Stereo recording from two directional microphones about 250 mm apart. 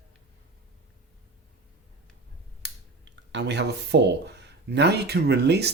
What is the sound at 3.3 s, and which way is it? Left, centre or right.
Speech, right.